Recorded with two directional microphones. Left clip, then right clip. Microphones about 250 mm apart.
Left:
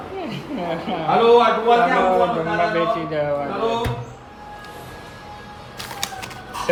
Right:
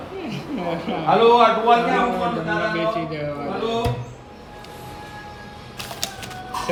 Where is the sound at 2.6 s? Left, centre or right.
Left.